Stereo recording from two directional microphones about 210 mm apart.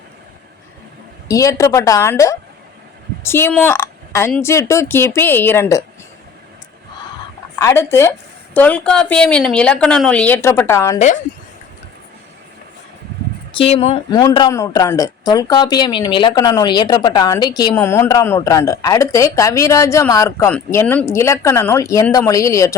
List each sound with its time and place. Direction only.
1.3 s speech: 15° left (ahead or behind)
7.6 s a woman's voice: 10° left (ahead or behind)
10.9 s speech: 35° left (ahead or behind)
13.5 s speech: 25° left (ahead or behind)
14.1 s speech: 15° left (ahead or behind)